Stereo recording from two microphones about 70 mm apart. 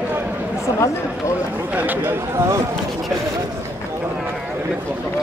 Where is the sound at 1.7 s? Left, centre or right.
Right.